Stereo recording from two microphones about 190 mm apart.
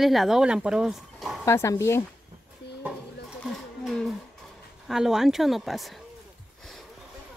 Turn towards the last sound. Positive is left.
turn(degrees=0)  # may be behind; listen again after turning